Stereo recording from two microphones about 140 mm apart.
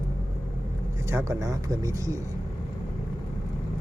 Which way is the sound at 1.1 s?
20° right (ahead or behind).